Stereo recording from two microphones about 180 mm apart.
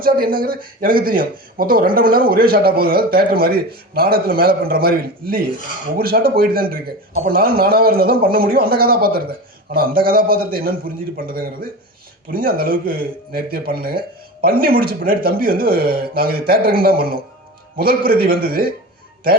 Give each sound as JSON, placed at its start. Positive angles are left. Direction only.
{"t": 0.0, "sound": "a man's voice", "side_deg": -50}